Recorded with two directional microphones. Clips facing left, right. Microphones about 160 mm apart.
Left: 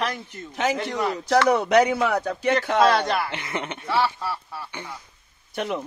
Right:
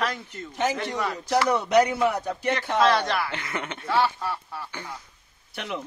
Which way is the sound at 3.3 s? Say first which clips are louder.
Left 2 dB; 20° left (ahead or behind).